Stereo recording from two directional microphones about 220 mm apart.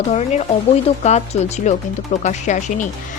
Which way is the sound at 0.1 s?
30° left (ahead or behind).